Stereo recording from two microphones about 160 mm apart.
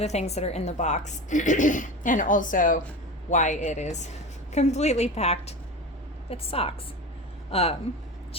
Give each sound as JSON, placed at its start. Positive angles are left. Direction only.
{"t": 0.0, "sound": "a woman's voice", "side_deg": 45}